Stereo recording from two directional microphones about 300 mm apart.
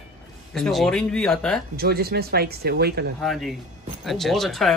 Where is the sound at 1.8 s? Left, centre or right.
Right.